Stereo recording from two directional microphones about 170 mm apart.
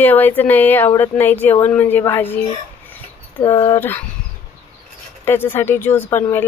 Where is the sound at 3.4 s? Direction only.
20° left (ahead or behind).